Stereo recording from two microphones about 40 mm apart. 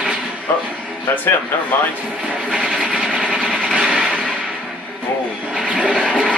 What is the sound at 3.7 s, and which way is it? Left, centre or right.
Music, centre.